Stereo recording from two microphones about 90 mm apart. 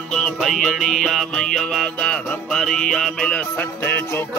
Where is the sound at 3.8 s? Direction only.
20° left (ahead or behind).